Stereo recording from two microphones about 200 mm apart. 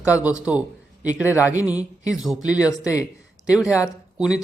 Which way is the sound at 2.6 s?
15° left (ahead or behind).